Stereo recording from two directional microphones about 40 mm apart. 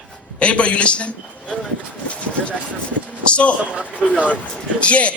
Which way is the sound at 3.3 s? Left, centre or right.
Left.